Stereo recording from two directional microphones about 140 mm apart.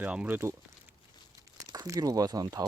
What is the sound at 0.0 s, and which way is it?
Speech, 10° right (ahead or behind).